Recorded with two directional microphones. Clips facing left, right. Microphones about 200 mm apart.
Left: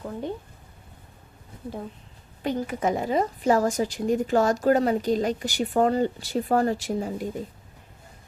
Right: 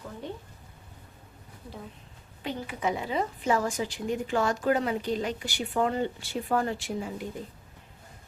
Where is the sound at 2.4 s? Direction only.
45° left (ahead or behind).